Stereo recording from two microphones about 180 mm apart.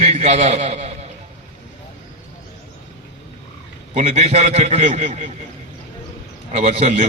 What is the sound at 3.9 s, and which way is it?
A man's voice, 40° right (ahead or behind).